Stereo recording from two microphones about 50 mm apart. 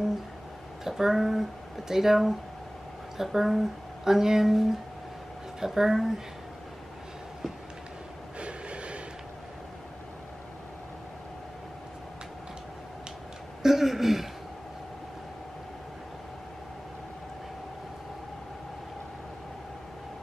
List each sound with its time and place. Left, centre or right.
0.8 s speech: centre
8.4 s train: right
13.6 s a sound: centre